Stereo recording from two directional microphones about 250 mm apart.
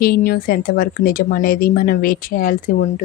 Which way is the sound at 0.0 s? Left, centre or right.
Left.